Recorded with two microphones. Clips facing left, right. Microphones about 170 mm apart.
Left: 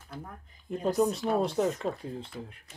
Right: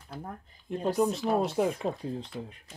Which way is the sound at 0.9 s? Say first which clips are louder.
Even; centre (ahead or behind).